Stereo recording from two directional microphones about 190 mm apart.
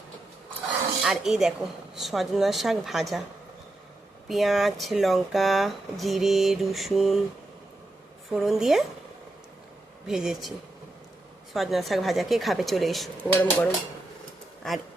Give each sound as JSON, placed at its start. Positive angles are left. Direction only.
{"t": 1.0, "sound": "speech", "side_deg": 0}
{"t": 4.3, "sound": "speech", "side_deg": 0}
{"t": 8.3, "sound": "speech", "side_deg": 0}
{"t": 10.1, "sound": "speech", "side_deg": 0}
{"t": 11.5, "sound": "speech", "side_deg": 0}